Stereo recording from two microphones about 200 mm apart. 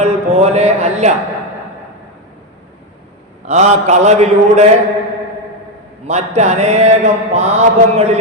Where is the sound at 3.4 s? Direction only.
35° right (ahead or behind).